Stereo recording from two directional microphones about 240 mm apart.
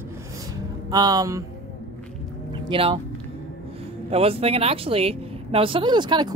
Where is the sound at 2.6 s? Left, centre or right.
Right.